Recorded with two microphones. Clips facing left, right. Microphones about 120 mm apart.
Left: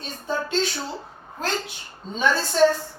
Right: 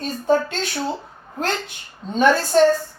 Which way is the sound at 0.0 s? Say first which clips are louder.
Right 9 dB; 50° right (ahead or behind).